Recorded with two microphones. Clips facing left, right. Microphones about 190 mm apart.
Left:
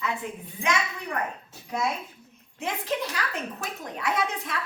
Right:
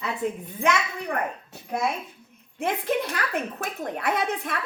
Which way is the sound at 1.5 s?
55° right (ahead or behind).